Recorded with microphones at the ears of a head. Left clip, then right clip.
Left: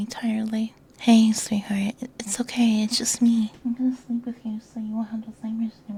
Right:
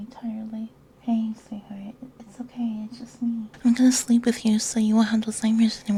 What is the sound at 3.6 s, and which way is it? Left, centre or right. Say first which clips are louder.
Speech: right 7 dB; right.